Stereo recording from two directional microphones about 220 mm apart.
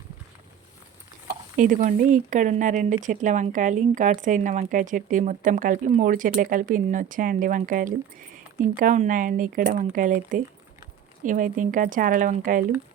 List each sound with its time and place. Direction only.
1.5 s speech: 35° right (ahead or behind)